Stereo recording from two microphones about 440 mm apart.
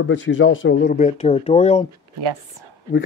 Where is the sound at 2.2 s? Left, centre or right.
Right.